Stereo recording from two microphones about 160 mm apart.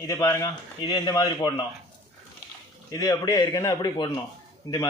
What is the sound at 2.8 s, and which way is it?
A man's voice, 20° left (ahead or behind).